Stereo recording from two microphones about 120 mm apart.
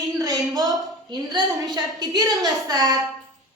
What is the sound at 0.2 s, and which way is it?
A woman's voice, 30° right (ahead or behind).